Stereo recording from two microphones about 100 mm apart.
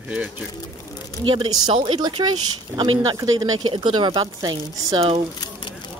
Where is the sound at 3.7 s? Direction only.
55° right (ahead or behind).